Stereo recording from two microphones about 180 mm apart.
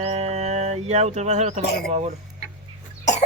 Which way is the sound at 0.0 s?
35° right (ahead or behind).